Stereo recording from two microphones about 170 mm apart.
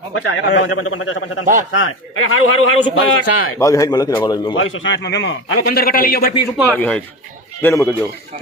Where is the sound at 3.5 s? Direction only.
20° left (ahead or behind).